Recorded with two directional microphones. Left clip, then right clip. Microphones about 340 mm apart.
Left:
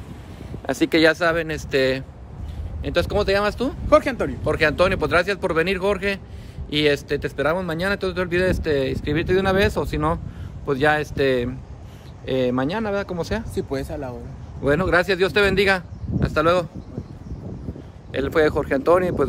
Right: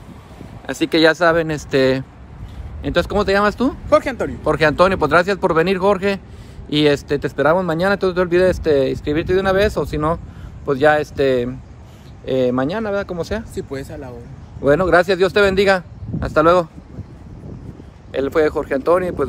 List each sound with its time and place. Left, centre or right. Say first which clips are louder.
0.7 s speech: right 3 dB; centre
3.9 s speech: right 1 dB; centre
4.5 s speech: right 5 dB; centre
13.6 s speech: left 1 dB; centre
14.6 s speech: right 5 dB; centre
18.1 s speech: right 2 dB; centre